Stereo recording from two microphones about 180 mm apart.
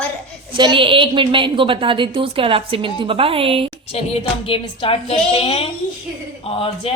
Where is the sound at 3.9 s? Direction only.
35° left (ahead or behind).